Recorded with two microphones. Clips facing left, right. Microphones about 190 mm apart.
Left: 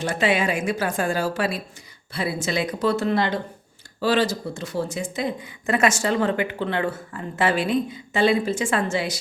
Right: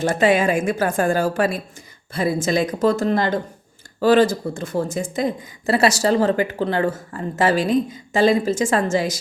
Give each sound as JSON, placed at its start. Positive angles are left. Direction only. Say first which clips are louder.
{"t": 0.0, "sound": "a woman's voice", "louder": "right 5 dB", "side_deg": -45}